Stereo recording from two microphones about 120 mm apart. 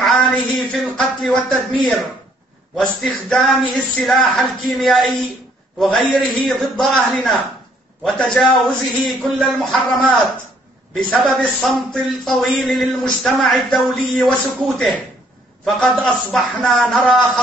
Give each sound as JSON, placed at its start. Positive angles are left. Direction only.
{"t": 0.0, "sound": "speech", "side_deg": 0}
{"t": 11.2, "sound": "speech", "side_deg": 0}